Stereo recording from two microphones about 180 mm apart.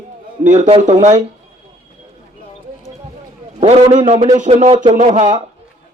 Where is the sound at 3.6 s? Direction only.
35° right (ahead or behind).